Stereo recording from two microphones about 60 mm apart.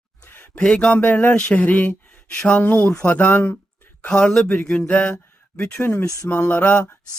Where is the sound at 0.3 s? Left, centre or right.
Left.